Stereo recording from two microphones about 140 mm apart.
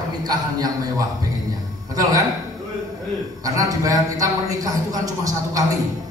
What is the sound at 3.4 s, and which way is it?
A man's voice, 25° right (ahead or behind).